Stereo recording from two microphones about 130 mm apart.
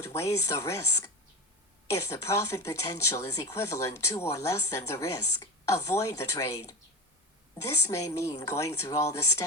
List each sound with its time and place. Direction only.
0.1 s speech: 20° left (ahead or behind)